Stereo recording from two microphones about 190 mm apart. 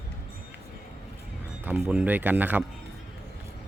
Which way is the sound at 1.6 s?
5° right (ahead or behind).